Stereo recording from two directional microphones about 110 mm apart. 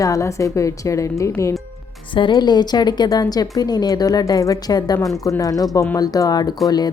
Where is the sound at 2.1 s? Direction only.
45° left (ahead or behind).